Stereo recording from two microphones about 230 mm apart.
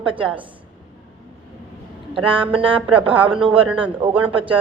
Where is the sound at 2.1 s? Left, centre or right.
Right.